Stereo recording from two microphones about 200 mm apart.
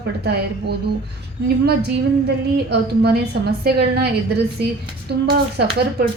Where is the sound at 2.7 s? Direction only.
55° right (ahead or behind).